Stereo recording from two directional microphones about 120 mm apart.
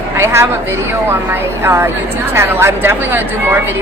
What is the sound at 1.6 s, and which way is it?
A woman's voice, 20° right (ahead or behind).